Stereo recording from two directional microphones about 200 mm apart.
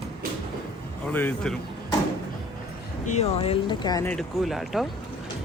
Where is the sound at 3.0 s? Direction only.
30° left (ahead or behind).